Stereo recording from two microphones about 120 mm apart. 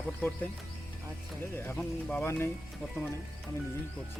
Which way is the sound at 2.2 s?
20° left (ahead or behind).